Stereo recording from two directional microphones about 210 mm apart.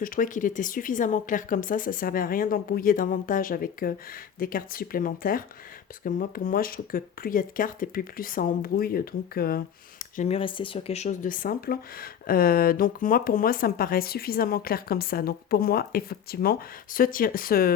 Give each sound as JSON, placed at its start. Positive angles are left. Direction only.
{"t": 0.0, "sound": "speech", "side_deg": 40}